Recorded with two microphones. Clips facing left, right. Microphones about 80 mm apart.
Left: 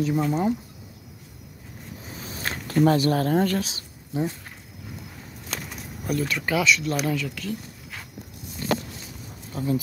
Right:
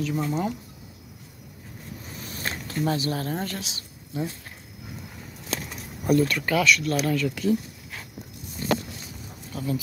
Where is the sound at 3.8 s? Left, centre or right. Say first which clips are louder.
Left 3 dB; left.